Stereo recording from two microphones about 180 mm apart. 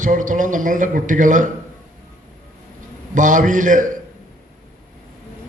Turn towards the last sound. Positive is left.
turn(degrees=-45)  # may be behind; listen again after turning